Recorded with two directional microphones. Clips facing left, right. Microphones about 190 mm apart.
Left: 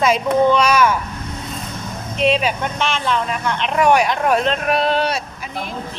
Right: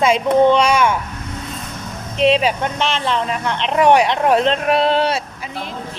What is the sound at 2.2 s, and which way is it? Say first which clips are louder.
Music: right 3 dB; 30° right (ahead or behind).